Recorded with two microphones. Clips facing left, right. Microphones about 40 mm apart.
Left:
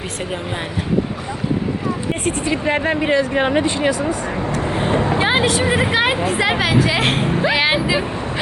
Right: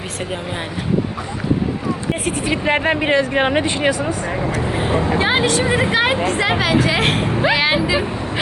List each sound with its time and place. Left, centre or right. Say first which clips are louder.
2.5 s speech: right 2 dB; right
5.2 s speech: even; centre